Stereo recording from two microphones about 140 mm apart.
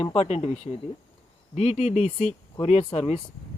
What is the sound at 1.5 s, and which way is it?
Speech, 50° left (ahead or behind).